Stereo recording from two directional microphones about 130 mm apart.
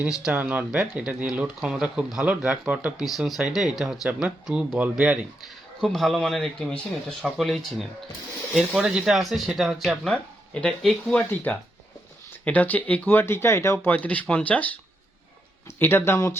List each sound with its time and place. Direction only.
0.3 s speech: 10° right (ahead or behind); by 6.8 s 10° left (ahead or behind)
7.2 s speech: centre (ahead or behind); by 16.4 s 20° left (ahead or behind)